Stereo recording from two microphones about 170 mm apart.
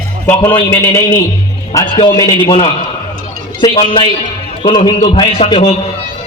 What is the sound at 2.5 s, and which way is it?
A man's voice, 35° left (ahead or behind).